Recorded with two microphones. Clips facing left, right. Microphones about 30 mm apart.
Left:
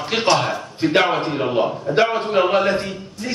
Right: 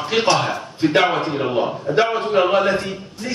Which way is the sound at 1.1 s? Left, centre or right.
Centre.